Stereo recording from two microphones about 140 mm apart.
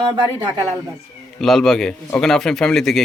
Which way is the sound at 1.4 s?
Centre (ahead or behind).